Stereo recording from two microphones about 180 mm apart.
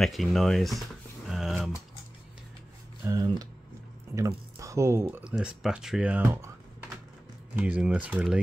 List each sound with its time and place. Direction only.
0.0 s speech: centre (ahead or behind)
1.3 s typing: centre (ahead or behind)
3.1 s speech: 20° right (ahead or behind)
4.6 s speech: 15° right (ahead or behind)
7.5 s speech: 10° right (ahead or behind)